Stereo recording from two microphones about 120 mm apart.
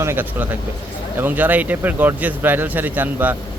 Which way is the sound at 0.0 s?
20° right (ahead or behind).